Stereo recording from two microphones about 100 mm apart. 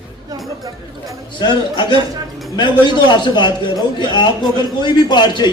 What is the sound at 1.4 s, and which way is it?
A man's voice, 50° left (ahead or behind).